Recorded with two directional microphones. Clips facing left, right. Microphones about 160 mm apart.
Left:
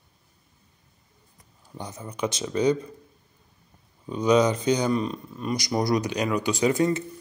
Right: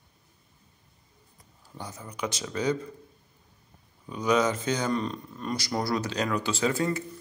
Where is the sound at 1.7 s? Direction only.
20° left (ahead or behind).